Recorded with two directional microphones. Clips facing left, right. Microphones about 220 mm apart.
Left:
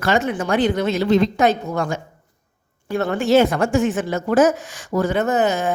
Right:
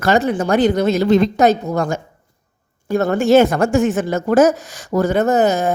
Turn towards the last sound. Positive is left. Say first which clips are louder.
# right 4 dB
turn(degrees=-40)  # may be behind; listen again after turning